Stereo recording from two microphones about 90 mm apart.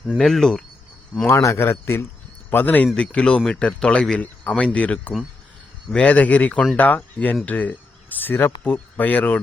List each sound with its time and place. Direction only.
0.2 s speech: 5° left (ahead or behind)
1.3 s a man's voice: 30° left (ahead or behind); by 9.4 s 15° left (ahead or behind)